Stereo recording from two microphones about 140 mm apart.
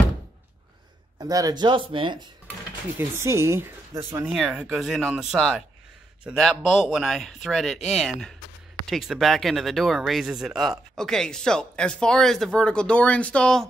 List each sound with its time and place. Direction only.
1.1 s speech: 25° right (ahead or behind)
3.0 s speech: 20° right (ahead or behind)
4.3 s speech: 5° right (ahead or behind)